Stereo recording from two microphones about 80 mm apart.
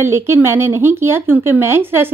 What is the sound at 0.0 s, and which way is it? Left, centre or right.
Speech, right.